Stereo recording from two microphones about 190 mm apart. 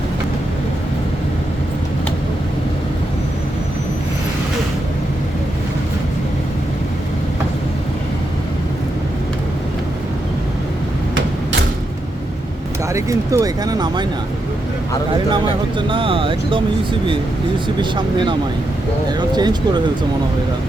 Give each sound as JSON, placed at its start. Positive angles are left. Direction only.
{"t": 12.9, "sound": "speech", "side_deg": -15}
{"t": 15.9, "sound": "speech", "side_deg": -25}
{"t": 17.7, "sound": "speech", "side_deg": -25}